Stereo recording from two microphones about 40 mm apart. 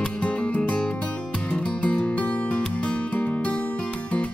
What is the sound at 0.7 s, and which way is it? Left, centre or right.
Music, left.